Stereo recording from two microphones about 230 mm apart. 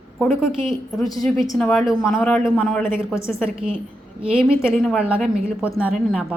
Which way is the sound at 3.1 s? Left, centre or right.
Centre.